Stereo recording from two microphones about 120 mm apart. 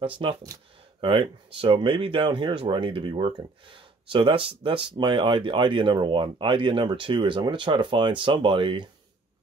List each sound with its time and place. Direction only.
0.0 s speech: 45° right (ahead or behind)